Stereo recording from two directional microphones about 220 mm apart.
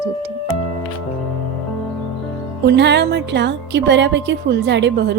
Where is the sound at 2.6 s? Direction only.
50° right (ahead or behind).